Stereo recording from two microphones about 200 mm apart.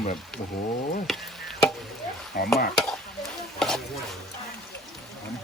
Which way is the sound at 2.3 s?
50° left (ahead or behind).